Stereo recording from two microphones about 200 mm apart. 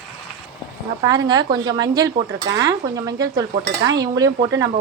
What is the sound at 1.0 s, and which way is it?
Speech, 20° right (ahead or behind).